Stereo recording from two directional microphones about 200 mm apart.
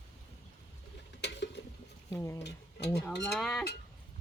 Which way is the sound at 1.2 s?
60° left (ahead or behind).